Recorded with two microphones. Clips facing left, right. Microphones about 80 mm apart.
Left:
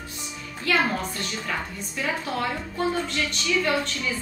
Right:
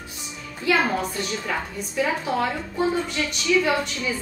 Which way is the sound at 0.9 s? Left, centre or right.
Centre.